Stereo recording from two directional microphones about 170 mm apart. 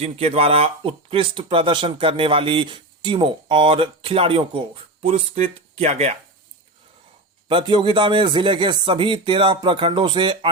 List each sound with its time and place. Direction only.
0.0 s speech: 35° right (ahead or behind)
7.4 s a man's voice: 30° right (ahead or behind)